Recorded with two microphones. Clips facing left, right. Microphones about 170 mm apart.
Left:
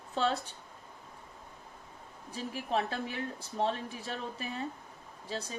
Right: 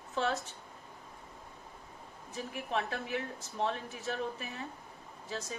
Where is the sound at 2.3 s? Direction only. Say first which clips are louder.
Left 3 dB; 35° left (ahead or behind).